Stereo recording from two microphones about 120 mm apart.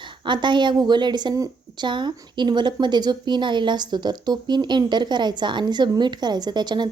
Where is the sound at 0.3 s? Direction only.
40° right (ahead or behind).